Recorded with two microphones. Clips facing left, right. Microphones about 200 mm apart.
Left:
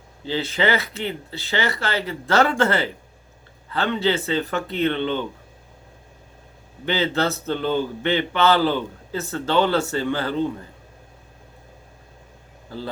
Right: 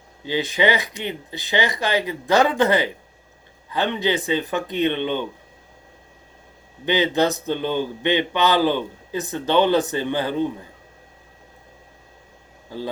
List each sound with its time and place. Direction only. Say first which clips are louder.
0.3 s speech: right 1 dB; 15° right (ahead or behind)
6.8 s speech: right 3 dB; 15° right (ahead or behind)